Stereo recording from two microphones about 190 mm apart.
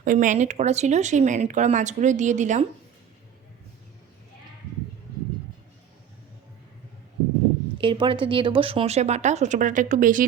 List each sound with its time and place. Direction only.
0.0 s speech: 45° right (ahead or behind)
7.8 s speech: 25° right (ahead or behind); by 10.2 s 45° right (ahead or behind)